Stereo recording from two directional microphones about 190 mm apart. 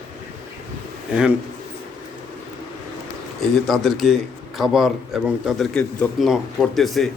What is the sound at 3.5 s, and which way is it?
A man's voice, centre (ahead or behind).